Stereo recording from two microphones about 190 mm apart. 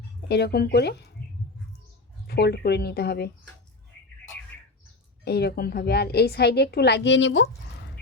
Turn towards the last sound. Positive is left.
turn(degrees=75)  # may be behind; listen again after turning